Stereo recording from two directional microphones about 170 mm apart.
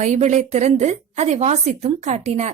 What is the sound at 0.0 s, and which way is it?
A woman's voice, 45° right (ahead or behind).